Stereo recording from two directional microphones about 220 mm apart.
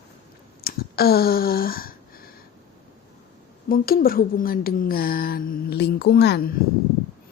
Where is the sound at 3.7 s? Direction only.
40° left (ahead or behind).